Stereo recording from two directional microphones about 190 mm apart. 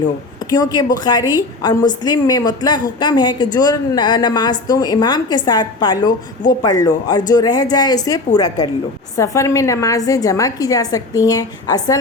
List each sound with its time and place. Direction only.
0.5 s a woman's voice: 20° left (ahead or behind)